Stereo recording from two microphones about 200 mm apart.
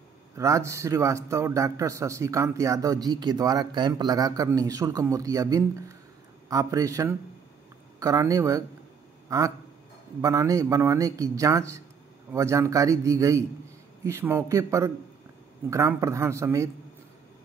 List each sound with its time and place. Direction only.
0.4 s a man's voice: 15° right (ahead or behind)